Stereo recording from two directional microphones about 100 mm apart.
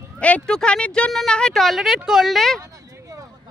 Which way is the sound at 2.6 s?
30° right (ahead or behind).